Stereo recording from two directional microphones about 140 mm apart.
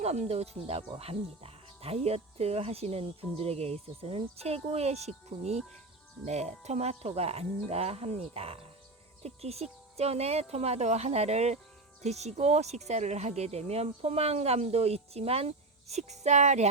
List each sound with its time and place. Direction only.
0.0 s speech: 50° right (ahead or behind)